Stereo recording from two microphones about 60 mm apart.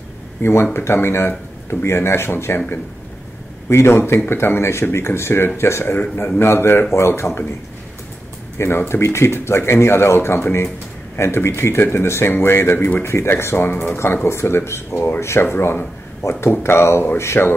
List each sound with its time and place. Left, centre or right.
0.4 s speech: left
3.6 s speech: left
5.9 s speech: left
6.3 s speech: left
8.5 s speech: left